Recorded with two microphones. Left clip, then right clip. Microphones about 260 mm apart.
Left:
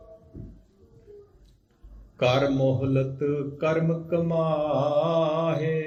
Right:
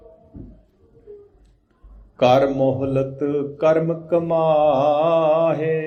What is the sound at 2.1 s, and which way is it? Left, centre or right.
A man's voice, centre.